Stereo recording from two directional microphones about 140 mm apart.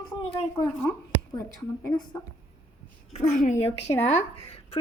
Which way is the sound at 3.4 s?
60° left (ahead or behind).